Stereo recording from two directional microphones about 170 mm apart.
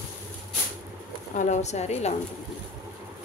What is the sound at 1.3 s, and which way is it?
Speech, 45° left (ahead or behind).